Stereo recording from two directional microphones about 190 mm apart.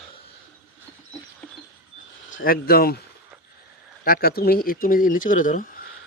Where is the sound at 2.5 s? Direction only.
50° left (ahead or behind).